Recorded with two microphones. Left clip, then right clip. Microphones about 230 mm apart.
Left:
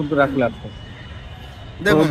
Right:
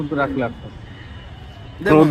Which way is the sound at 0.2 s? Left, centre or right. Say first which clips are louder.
Left 4 dB; left.